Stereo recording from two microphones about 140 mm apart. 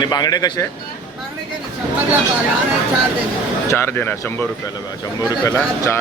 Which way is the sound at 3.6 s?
15° left (ahead or behind).